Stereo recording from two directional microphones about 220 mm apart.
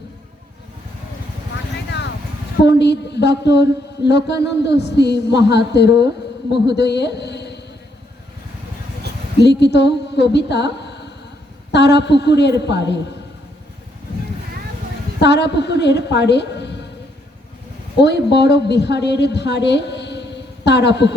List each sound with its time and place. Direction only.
2.6 s mantra: 50° left (ahead or behind)
6.7 s a woman's voice: 50° left (ahead or behind)
9.4 s a woman's voice: 50° left (ahead or behind)
11.7 s mantra: 50° left (ahead or behind)
15.2 s a woman's voice: 50° left (ahead or behind)
18.0 s a woman's voice: 50° left (ahead or behind)